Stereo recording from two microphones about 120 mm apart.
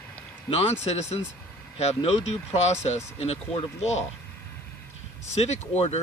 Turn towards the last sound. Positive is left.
turn(degrees=60)  # may be behind; listen again after turning